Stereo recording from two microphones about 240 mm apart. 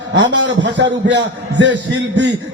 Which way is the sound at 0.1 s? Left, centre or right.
Right.